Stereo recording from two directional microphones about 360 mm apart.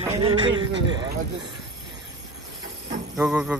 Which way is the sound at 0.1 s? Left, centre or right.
Centre.